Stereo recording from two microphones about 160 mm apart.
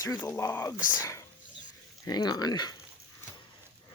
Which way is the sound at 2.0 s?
25° left (ahead or behind).